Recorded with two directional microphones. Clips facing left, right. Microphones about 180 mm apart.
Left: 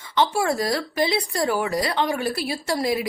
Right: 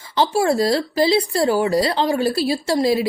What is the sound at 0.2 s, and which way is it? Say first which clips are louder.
A woman's voice: right 4 dB; 30° right (ahead or behind).